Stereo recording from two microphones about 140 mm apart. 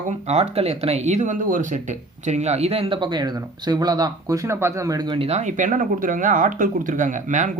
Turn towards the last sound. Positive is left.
turn(degrees=-65)  # may be behind; listen again after turning